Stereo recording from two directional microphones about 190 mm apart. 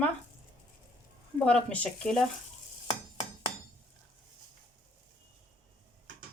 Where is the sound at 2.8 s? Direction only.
30° left (ahead or behind).